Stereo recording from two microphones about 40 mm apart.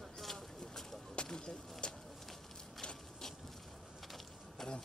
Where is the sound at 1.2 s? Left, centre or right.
Left.